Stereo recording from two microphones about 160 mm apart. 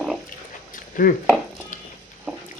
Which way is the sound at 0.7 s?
60° left (ahead or behind).